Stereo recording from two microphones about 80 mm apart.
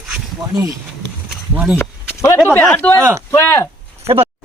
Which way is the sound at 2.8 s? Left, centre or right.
Centre.